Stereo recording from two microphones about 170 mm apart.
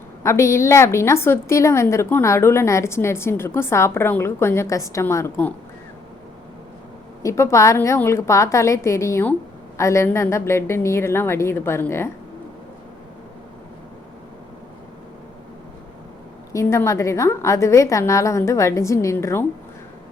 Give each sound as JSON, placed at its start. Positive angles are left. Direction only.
{"t": 0.2, "sound": "a woman's voice", "side_deg": 15}
{"t": 7.2, "sound": "a woman's voice", "side_deg": 15}
{"t": 16.5, "sound": "a woman's voice", "side_deg": 15}